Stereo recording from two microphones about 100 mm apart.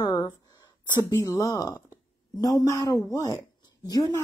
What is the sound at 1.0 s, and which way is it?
Speech, 25° left (ahead or behind).